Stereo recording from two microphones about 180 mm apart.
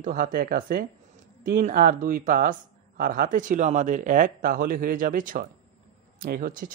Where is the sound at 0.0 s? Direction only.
55° right (ahead or behind).